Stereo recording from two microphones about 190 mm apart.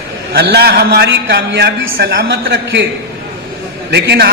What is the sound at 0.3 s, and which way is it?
A man's voice, 55° right (ahead or behind).